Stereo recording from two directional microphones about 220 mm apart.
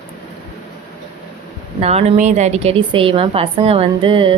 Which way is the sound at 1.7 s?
30° right (ahead or behind).